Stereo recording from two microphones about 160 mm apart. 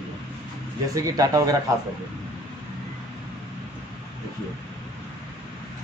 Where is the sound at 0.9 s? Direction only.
20° right (ahead or behind).